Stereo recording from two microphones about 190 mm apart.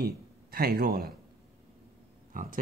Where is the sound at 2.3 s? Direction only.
45° right (ahead or behind).